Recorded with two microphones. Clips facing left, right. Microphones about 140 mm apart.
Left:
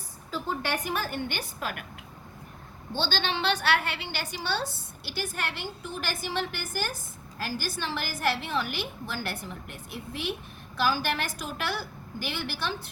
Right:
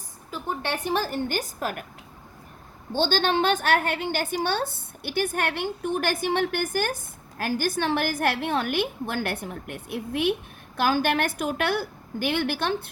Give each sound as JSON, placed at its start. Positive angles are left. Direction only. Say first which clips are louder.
{"t": 0.3, "sound": "a woman's voice", "louder": "right 1 dB", "side_deg": -20}
{"t": 2.9, "sound": "a woman's voice", "louder": "right 7 dB", "side_deg": -50}